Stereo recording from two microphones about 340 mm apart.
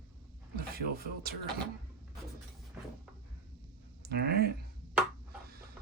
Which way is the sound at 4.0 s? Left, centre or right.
Right.